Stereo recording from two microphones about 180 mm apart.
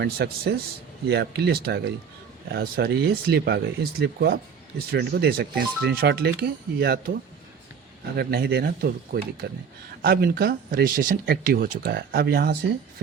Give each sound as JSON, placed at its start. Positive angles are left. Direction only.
{"t": 0.0, "sound": "speech", "side_deg": -60}